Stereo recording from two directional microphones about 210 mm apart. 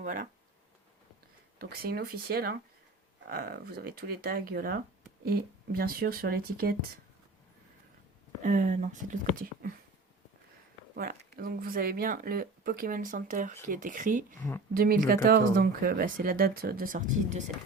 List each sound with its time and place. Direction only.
0.0 s speech: 40° right (ahead or behind)
1.5 s speech: 45° right (ahead or behind)
8.4 s speech: 35° right (ahead or behind)
10.9 s speech: 45° right (ahead or behind)